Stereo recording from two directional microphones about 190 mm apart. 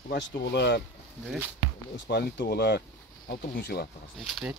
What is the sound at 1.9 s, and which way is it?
Speech, 65° left (ahead or behind).